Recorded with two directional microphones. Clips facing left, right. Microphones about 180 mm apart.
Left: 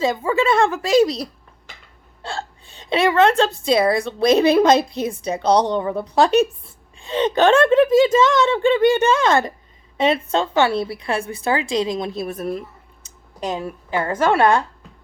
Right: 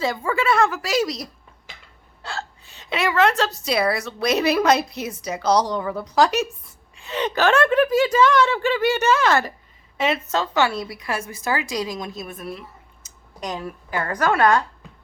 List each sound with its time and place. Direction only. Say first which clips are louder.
0.0 s a woman's voice: left 4 dB; 20° left (ahead or behind)
2.2 s hiccup: left 3 dB; 30° left (ahead or behind)
3.6 s a woman's voice: left 5 dB; 25° left (ahead or behind); by 12.6 s 40° left (ahead or behind)
13.4 s a woman's voice: left 4 dB; 25° left (ahead or behind)